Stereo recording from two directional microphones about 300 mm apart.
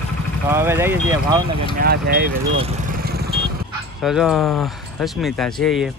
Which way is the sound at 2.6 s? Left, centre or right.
Right.